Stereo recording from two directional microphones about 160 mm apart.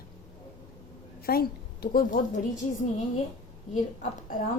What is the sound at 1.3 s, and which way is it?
Speech, 70° left (ahead or behind).